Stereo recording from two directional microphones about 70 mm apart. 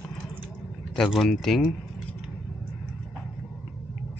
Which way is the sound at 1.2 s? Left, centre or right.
Centre.